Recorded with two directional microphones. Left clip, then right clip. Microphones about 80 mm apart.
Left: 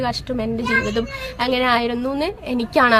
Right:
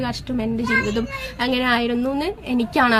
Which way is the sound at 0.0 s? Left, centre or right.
Left.